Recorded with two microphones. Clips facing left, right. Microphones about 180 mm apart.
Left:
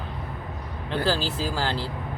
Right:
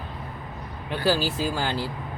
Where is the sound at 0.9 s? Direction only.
10° right (ahead or behind).